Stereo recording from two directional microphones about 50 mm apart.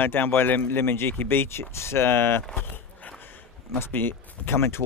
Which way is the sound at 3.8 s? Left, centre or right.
Left.